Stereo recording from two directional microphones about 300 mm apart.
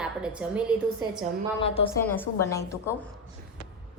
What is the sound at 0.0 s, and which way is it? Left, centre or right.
A child's voice, centre.